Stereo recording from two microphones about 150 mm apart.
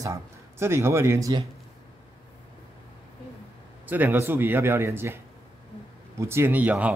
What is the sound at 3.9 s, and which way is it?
Speech, 10° right (ahead or behind).